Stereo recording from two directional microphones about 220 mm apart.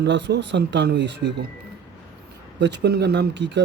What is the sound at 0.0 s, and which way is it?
A man's voice, 50° right (ahead or behind).